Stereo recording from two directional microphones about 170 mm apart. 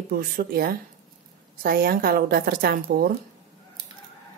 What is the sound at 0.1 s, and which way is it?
A woman's voice, 60° right (ahead or behind).